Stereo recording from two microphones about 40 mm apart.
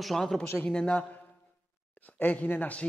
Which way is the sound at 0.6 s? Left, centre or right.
Left.